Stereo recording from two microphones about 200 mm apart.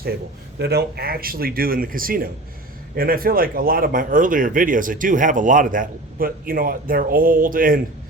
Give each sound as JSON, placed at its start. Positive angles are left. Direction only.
{"t": 0.6, "sound": "speech", "side_deg": -55}